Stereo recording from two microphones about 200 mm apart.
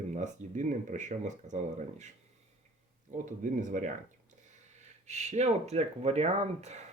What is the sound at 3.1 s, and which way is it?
Speech, 40° right (ahead or behind).